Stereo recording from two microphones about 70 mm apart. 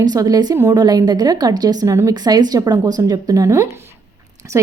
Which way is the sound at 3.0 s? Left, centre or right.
Right.